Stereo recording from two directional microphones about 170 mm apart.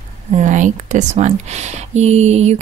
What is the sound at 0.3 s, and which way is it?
Speech, 45° right (ahead or behind).